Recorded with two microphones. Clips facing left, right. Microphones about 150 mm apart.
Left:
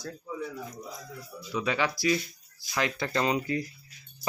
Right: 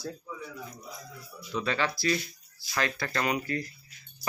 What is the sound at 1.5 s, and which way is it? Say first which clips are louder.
A man's voice: left 1 dB; 10° left (ahead or behind).